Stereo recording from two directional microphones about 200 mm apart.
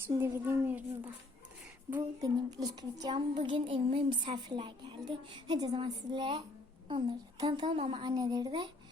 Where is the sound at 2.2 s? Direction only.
20° right (ahead or behind).